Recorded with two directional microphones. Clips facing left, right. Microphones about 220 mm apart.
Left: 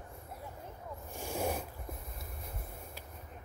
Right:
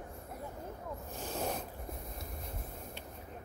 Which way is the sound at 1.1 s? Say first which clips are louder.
Left 3 dB; 15° left (ahead or behind).